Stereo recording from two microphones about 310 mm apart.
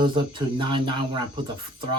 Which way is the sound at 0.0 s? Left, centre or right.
Centre.